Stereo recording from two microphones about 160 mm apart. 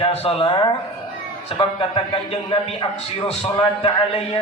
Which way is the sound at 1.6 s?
35° left (ahead or behind).